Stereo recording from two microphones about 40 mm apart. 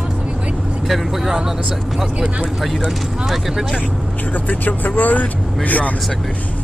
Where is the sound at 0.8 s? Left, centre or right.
Centre.